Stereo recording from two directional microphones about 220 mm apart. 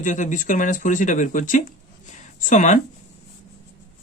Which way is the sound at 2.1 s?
35° left (ahead or behind).